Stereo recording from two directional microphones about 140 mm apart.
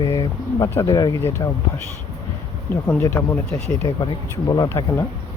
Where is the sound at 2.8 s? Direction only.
20° left (ahead or behind).